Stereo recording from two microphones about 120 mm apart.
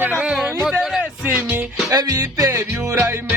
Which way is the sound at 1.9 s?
30° right (ahead or behind).